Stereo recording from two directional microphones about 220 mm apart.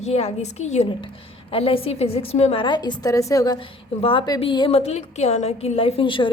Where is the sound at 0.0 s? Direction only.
30° left (ahead or behind).